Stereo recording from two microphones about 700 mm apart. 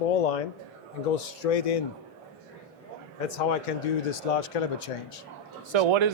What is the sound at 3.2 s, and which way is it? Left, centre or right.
Speech, left.